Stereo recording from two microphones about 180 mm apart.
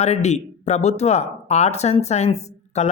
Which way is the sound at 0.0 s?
40° left (ahead or behind).